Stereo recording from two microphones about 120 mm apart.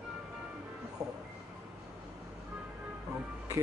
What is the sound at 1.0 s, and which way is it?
Speech, 30° right (ahead or behind).